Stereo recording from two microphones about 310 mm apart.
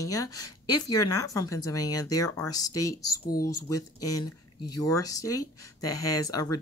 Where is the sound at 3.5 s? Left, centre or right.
Left.